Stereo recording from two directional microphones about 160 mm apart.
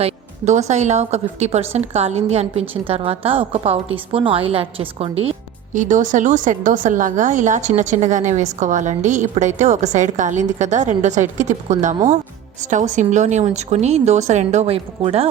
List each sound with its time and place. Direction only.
0.0 s a woman's voice: 45° right (ahead or behind)
5.7 s a woman's voice: 50° right (ahead or behind)